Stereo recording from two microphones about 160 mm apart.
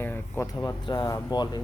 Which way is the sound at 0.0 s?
10° left (ahead or behind).